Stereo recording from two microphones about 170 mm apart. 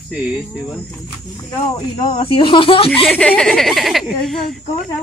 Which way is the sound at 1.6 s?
30° left (ahead or behind).